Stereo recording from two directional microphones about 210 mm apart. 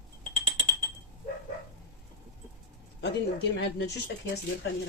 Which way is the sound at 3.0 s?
55° left (ahead or behind).